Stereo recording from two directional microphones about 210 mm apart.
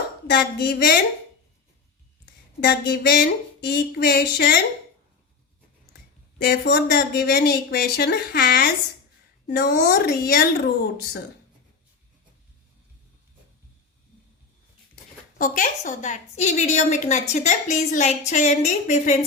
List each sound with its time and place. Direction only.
0.3 s speech: 50° left (ahead or behind)
2.2 s speech: 50° left (ahead or behind)
6.4 s speech: 50° left (ahead or behind)
15.4 s a woman's voice: 40° left (ahead or behind)